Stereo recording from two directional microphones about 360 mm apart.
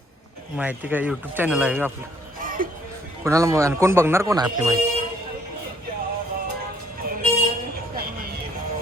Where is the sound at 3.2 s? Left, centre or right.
Centre.